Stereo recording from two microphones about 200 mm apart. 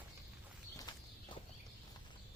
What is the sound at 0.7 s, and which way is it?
Walk, 20° left (ahead or behind).